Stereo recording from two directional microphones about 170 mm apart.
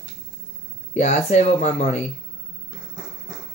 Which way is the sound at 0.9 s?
40° left (ahead or behind).